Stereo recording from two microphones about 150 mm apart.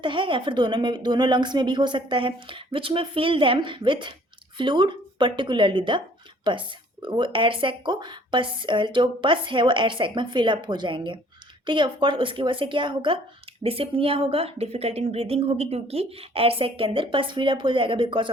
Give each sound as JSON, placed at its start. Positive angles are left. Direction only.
{"t": 0.0, "sound": "speech", "side_deg": -35}